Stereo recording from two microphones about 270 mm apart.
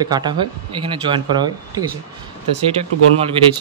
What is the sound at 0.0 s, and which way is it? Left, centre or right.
A man's voice, centre.